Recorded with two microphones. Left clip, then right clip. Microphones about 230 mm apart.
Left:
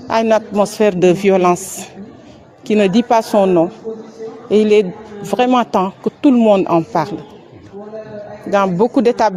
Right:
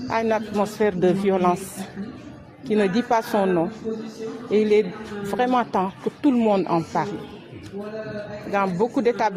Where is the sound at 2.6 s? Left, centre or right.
Left.